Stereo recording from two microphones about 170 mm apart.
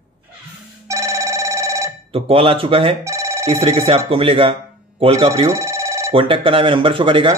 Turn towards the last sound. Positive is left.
turn(degrees=-30)  # may be behind; listen again after turning